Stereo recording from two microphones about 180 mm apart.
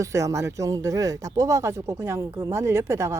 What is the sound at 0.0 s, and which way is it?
Speech, 15° right (ahead or behind).